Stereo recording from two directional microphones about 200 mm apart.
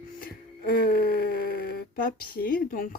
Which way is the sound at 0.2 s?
45° left (ahead or behind).